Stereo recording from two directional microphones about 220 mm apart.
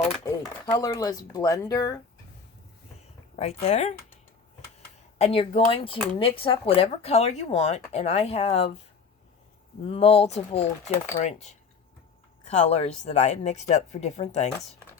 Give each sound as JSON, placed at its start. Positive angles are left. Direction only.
{"t": 0.7, "sound": "speech", "side_deg": 15}
{"t": 3.3, "sound": "speech", "side_deg": 30}
{"t": 5.1, "sound": "speech", "side_deg": 25}
{"t": 9.8, "sound": "speech", "side_deg": 25}